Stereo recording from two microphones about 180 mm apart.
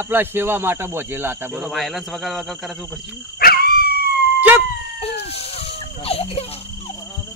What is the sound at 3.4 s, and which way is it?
Dog, 55° left (ahead or behind).